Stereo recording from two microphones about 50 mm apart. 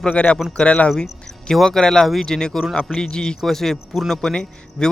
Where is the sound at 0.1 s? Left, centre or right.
Left.